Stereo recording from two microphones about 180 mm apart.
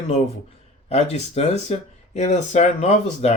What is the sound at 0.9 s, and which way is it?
Speech, 35° left (ahead or behind).